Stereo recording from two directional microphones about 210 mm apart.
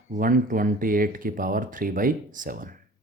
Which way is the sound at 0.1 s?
40° right (ahead or behind).